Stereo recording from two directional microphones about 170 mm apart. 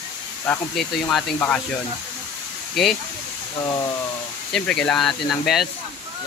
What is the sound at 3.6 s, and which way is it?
Speech, 20° left (ahead or behind).